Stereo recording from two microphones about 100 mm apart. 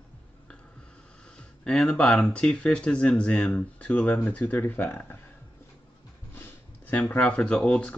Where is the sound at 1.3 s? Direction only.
10° left (ahead or behind).